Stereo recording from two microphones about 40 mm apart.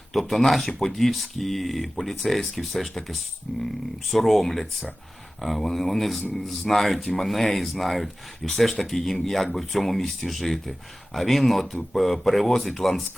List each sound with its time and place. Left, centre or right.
0.1 s speech: centre
3.5 s speech: centre
4.1 s speech: centre